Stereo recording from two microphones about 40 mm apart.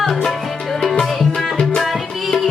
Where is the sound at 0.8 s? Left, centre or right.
Centre.